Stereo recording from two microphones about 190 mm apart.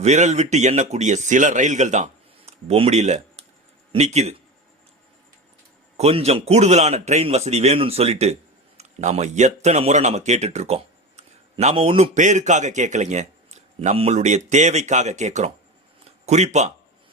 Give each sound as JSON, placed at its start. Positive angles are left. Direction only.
{"t": 0.0, "sound": "a man's voice", "side_deg": -35}
{"t": 6.0, "sound": "a man's voice", "side_deg": -30}